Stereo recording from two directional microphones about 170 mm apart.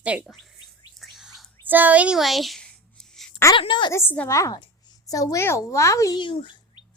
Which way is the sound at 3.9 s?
15° left (ahead or behind).